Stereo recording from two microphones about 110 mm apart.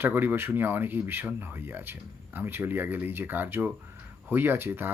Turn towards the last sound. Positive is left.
turn(degrees=-20)  # may be behind; listen again after turning